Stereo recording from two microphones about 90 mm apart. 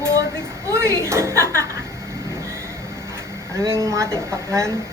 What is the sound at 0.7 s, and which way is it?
Speech, 30° right (ahead or behind).